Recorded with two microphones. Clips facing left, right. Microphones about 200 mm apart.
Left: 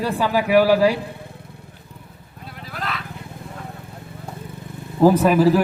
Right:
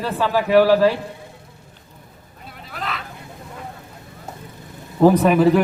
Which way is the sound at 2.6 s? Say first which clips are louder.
Even; centre (ahead or behind).